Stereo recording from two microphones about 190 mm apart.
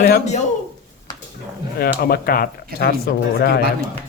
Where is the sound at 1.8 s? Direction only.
55° left (ahead or behind).